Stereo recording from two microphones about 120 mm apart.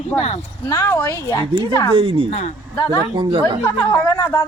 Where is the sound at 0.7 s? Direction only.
25° left (ahead or behind).